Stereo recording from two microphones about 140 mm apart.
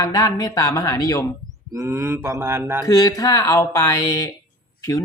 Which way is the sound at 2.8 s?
25° left (ahead or behind).